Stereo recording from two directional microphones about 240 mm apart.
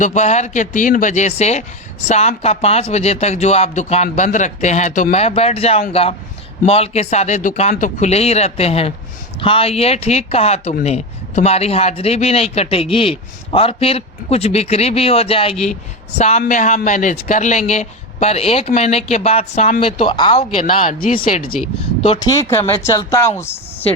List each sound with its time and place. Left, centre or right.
0.0 s speech: left
20.8 s speech: left
22.0 s speech: centre